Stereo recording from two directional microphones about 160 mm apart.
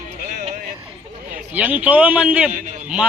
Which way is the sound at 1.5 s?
10° right (ahead or behind).